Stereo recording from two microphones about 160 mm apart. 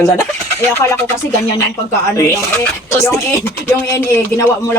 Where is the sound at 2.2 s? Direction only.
20° left (ahead or behind).